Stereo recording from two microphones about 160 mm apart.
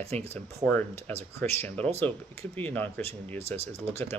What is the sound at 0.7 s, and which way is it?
Speech, 10° left (ahead or behind).